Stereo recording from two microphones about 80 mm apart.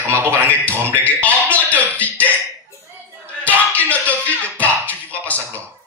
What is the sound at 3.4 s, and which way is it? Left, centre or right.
Speech, centre.